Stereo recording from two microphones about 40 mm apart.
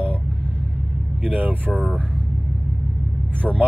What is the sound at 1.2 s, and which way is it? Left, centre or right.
Speech, right.